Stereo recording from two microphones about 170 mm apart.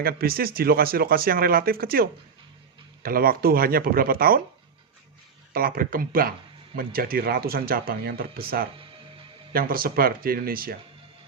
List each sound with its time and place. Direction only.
0.0 s speech: 65° right (ahead or behind)
5.5 s speech: 55° right (ahead or behind)